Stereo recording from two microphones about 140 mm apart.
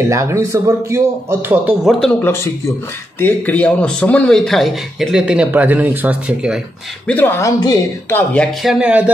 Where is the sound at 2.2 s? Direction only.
20° left (ahead or behind); by 6.6 s 5° right (ahead or behind).